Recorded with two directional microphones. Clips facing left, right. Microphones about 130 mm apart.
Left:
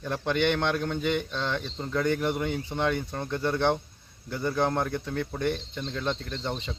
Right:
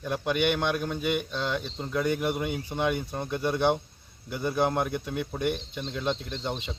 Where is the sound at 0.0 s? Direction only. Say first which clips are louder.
Even; 10° right (ahead or behind).